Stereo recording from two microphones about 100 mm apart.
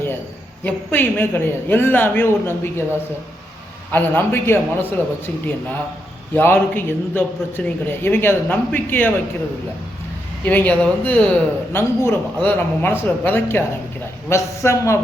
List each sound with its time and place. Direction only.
0.6 s a man's voice: 20° left (ahead or behind)
10.4 s a man's voice: 15° left (ahead or behind)